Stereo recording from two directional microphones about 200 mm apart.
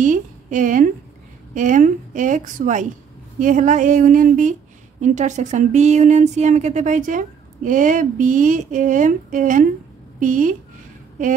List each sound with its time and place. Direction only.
0.0 s a woman's voice: 40° right (ahead or behind)